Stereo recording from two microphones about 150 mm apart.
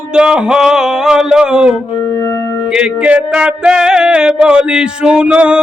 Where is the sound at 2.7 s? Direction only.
5° right (ahead or behind).